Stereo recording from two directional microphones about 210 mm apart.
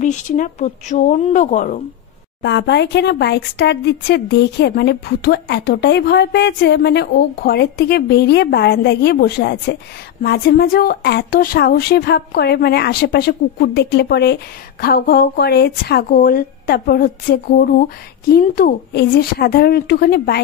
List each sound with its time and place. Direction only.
0.0 s speech: 35° left (ahead or behind)
2.4 s speech: 55° left (ahead or behind)